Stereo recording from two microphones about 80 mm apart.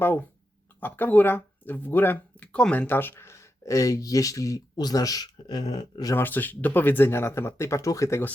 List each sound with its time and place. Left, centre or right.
0.0 s speech: left
2.5 s speech: centre
2.8 s speech: left
6.1 s speech: left